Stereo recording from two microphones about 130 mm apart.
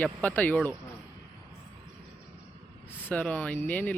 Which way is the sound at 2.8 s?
10° left (ahead or behind).